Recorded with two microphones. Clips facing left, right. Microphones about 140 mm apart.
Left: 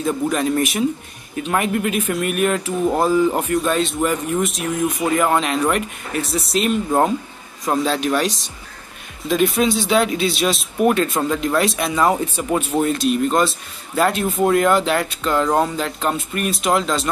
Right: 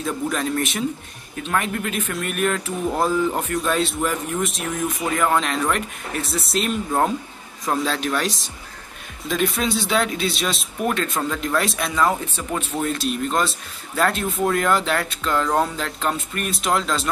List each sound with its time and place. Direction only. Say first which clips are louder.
0.0 s a man's voice: left 5 dB; 5° left (ahead or behind)
7.8 s a man's voice: left 6 dB; 5° left (ahead or behind)
10.8 s speech: left 6 dB; 15° left (ahead or behind)
12.0 s speech: left 3 dB; 25° left (ahead or behind)
12.8 s a man's voice: left 5 dB; centre (ahead or behind)